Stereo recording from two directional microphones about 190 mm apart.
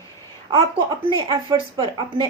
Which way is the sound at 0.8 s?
25° right (ahead or behind).